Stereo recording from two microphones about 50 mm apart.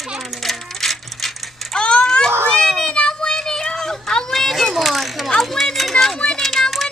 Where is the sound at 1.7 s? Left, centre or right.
Centre.